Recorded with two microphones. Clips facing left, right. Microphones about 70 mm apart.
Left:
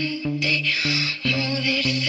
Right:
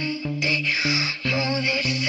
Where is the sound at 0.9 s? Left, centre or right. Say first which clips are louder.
Even; right.